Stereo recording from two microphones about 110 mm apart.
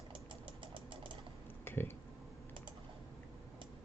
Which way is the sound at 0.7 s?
50° right (ahead or behind).